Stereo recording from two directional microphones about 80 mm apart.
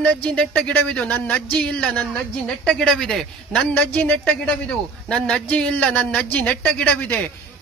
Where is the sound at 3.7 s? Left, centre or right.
Centre.